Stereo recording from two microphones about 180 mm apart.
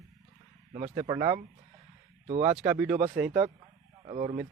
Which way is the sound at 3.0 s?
50° right (ahead or behind).